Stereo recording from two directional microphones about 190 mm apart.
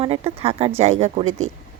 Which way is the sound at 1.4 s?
90° right.